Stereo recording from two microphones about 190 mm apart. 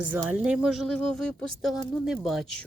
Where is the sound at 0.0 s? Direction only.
10° right (ahead or behind).